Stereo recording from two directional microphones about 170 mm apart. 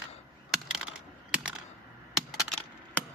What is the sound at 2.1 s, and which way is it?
Computer keyboard, centre (ahead or behind).